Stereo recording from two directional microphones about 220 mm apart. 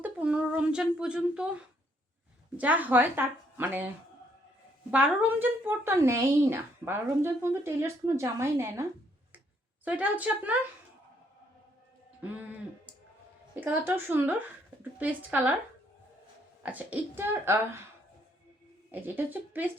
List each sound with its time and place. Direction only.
0.0 s a sound: 5° right (ahead or behind)
2.6 s speech: 5° right (ahead or behind)
4.9 s speech: 5° right (ahead or behind)
12.2 s speech: 5° right (ahead or behind)
16.6 s speech: 5° right (ahead or behind)
18.9 s speech: 10° right (ahead or behind)